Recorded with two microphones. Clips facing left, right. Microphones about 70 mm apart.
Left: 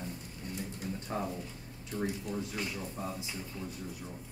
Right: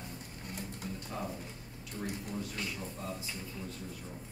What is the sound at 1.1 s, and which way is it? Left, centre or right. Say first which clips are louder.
Speech: left 4 dB; left.